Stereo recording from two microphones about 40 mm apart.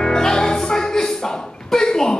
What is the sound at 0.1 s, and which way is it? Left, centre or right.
Music, centre.